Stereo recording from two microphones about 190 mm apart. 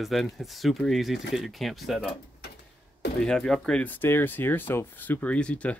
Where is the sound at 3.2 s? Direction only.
5° left (ahead or behind).